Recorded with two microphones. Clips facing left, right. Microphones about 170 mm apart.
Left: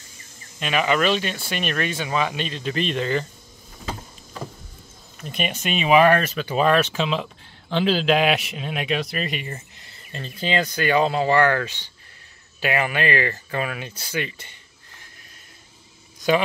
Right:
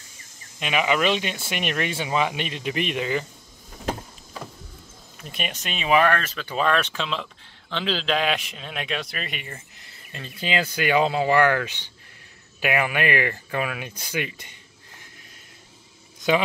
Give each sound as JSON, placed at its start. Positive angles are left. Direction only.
{"t": 0.6, "sound": "speech", "side_deg": -10}
{"t": 5.2, "sound": "speech", "side_deg": 0}
{"t": 10.4, "sound": "speech", "side_deg": -10}